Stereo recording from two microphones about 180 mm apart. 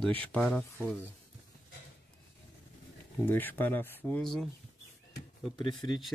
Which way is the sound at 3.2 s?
10° left (ahead or behind).